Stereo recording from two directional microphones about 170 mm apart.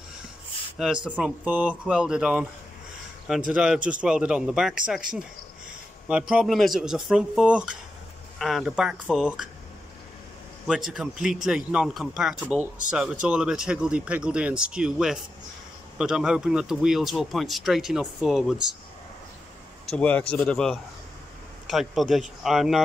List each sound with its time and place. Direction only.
0.7 s speech: 5° right (ahead or behind)
10.7 s speech: 5° right (ahead or behind)
19.9 s speech: 5° left (ahead or behind)